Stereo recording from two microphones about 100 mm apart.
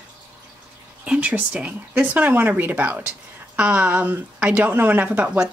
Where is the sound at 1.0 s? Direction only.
10° right (ahead or behind).